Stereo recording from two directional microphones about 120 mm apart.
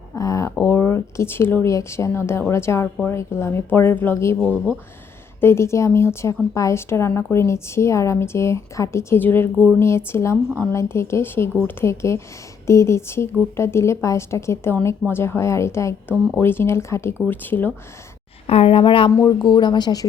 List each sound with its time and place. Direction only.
0.1 s a sound: 25° left (ahead or behind)
0.6 s a woman's voice: 20° left (ahead or behind)
5.4 s a woman's voice: 20° left (ahead or behind)
18.4 s a woman's voice: 55° left (ahead or behind); by 20.1 s 35° left (ahead or behind)